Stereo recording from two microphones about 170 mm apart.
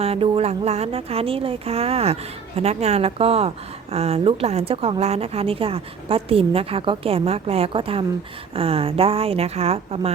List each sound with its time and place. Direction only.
0.0 s a woman's voice: 35° right (ahead or behind)